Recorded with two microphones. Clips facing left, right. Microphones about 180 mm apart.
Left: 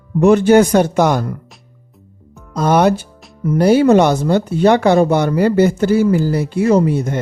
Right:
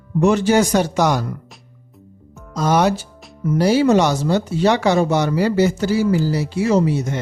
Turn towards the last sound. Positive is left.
turn(degrees=55)  # may be behind; listen again after turning